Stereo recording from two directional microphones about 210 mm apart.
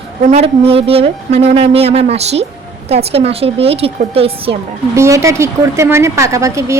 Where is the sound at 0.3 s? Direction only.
30° right (ahead or behind).